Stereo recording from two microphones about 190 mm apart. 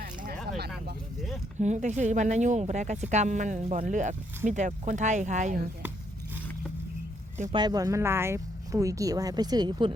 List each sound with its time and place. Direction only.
0.0 s a sound: 50° right (ahead or behind)
1.5 s speech: 40° right (ahead or behind)
7.5 s speech: 20° right (ahead or behind)